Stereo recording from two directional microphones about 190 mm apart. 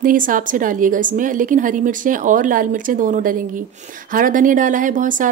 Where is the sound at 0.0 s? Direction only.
45° right (ahead or behind).